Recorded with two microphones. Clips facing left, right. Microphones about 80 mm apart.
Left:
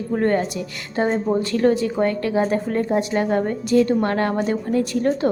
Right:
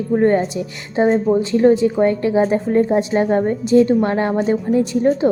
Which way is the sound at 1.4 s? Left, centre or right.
Centre.